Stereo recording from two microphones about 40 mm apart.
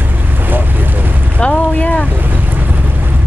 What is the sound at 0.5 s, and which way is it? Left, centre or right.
Boat, right.